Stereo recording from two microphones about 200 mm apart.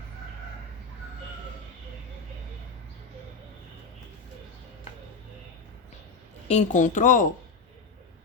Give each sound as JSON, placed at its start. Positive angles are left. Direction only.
{"t": 6.5, "sound": "speech", "side_deg": 35}